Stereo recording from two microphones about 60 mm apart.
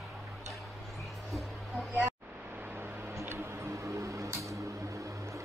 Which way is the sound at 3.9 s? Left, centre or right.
Right.